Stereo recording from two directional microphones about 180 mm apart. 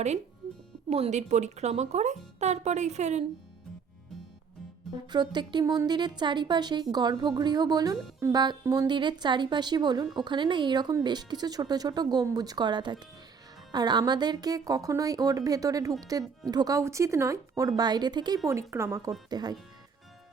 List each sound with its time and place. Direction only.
0.9 s speech: 35° right (ahead or behind)
5.1 s speech: 25° right (ahead or behind)